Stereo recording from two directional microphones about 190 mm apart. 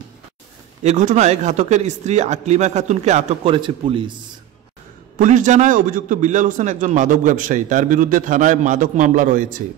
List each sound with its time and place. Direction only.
0.8 s speech: 40° right (ahead or behind)
5.2 s a man's voice: 40° right (ahead or behind)